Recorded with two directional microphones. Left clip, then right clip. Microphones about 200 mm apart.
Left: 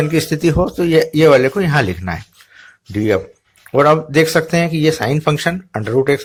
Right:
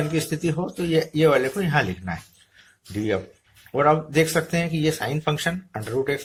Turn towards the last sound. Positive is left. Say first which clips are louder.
# left 10 dB
turn(degrees=35)  # may be behind; listen again after turning